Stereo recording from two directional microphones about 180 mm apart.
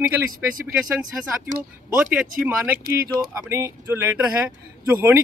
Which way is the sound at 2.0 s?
10° right (ahead or behind).